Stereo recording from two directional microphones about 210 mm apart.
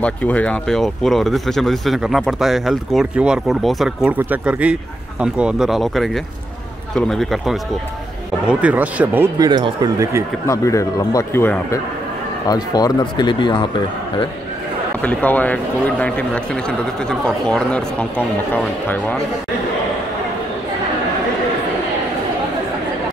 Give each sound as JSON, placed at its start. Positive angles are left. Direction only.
{"t": 0.0, "sound": "speech", "side_deg": 5}
{"t": 10.4, "sound": "a man's voice", "side_deg": 15}
{"t": 15.0, "sound": "speech", "side_deg": 5}